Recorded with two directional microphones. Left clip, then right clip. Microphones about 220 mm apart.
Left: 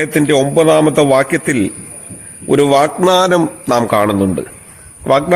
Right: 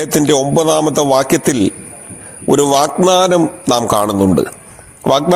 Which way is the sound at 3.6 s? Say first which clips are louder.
Left 3 dB; 20° right (ahead or behind).